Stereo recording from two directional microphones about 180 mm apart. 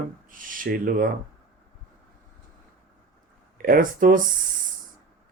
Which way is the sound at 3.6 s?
50° right (ahead or behind).